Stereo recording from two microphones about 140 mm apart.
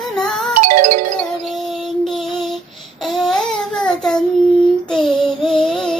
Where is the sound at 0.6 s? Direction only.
60° right (ahead or behind).